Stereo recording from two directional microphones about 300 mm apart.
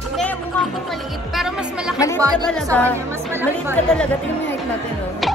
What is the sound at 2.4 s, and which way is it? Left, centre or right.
Speech, centre.